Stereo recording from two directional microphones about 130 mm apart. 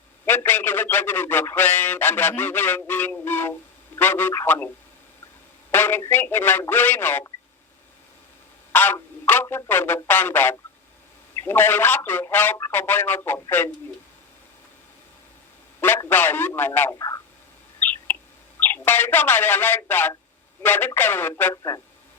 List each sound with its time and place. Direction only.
0.3 s a man's voice: 15° left (ahead or behind)
5.7 s a man's voice: 15° left (ahead or behind)
8.7 s a man's voice: 15° left (ahead or behind)
16.0 s a man's voice: 15° left (ahead or behind)
18.6 s a man's voice: 15° left (ahead or behind)
21.5 s speech: 25° left (ahead or behind)